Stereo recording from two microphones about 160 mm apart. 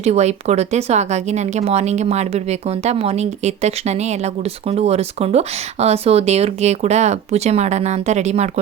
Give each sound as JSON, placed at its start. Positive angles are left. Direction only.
{"t": 0.0, "sound": "speech", "side_deg": -45}